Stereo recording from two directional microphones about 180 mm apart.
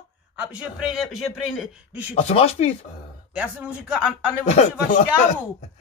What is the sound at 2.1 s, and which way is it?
Speech, 35° left (ahead or behind).